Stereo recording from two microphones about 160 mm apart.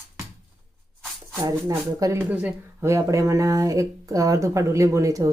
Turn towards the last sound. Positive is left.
turn(degrees=-20)  # may be behind; listen again after turning